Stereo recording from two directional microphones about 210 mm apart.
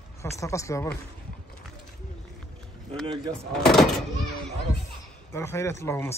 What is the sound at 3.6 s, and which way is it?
Speech, centre (ahead or behind).